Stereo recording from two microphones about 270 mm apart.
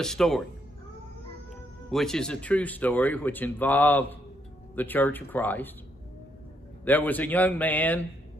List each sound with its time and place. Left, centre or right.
0.0 s speech: centre
1.9 s speech: centre
6.8 s speech: centre